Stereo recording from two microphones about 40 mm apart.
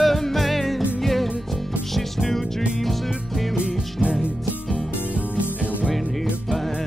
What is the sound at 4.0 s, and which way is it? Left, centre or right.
Music, right.